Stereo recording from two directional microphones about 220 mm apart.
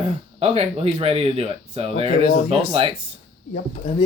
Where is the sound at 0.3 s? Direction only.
30° right (ahead or behind).